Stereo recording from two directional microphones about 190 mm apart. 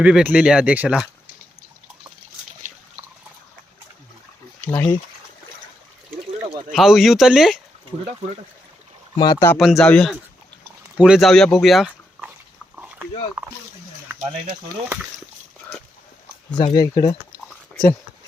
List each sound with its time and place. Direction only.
0.0 s speech: 5° right (ahead or behind)
4.6 s speech: 10° left (ahead or behind)
6.7 s speech: centre (ahead or behind)
9.1 s speech: 20° left (ahead or behind)
9.6 s speech: centre (ahead or behind)
12.7 s a sound: 5° right (ahead or behind)
13.4 s speech: 10° right (ahead or behind)
16.7 s a sound: 20° left (ahead or behind)